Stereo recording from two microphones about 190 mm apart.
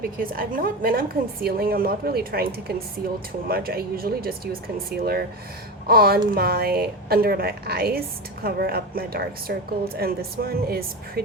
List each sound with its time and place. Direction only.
0.2 s a woman's voice: 50° right (ahead or behind)